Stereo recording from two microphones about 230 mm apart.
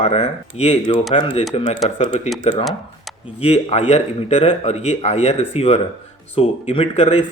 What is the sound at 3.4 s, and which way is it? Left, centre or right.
A man's voice, left.